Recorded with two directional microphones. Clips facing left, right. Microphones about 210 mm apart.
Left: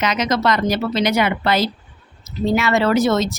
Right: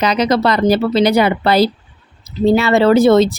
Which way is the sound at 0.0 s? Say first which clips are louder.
Right 5 dB; 35° right (ahead or behind).